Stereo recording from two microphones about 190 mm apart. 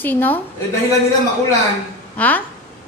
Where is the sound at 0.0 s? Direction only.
10° left (ahead or behind).